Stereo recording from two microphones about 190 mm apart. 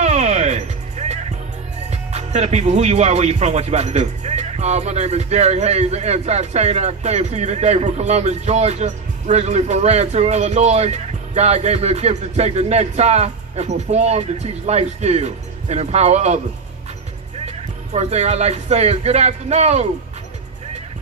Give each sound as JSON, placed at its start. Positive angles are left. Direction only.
{"t": 0.0, "sound": "music", "side_deg": -35}
{"t": 1.9, "sound": "speech", "side_deg": -35}
{"t": 17.9, "sound": "speech", "side_deg": -35}